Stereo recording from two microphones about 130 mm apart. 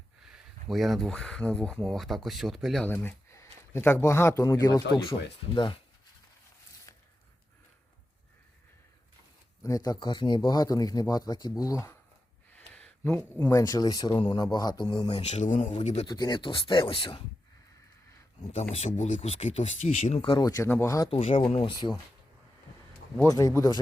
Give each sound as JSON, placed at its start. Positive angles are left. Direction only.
{"t": 0.3, "sound": "speech", "side_deg": 0}
{"t": 2.8, "sound": "speech", "side_deg": 10}
{"t": 9.6, "sound": "speech", "side_deg": 30}
{"t": 12.5, "sound": "speech", "side_deg": 10}
{"t": 15.3, "sound": "a man's voice", "side_deg": 70}
{"t": 15.7, "sound": "speech", "side_deg": 60}
{"t": 16.0, "sound": "speech", "side_deg": 30}
{"t": 18.7, "sound": "speech", "side_deg": 60}
{"t": 20.3, "sound": "speech", "side_deg": 30}
{"t": 21.1, "sound": "speech", "side_deg": 50}
{"t": 23.2, "sound": "speech", "side_deg": 25}